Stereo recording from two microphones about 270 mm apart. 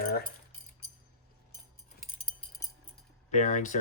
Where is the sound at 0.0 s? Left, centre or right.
Left.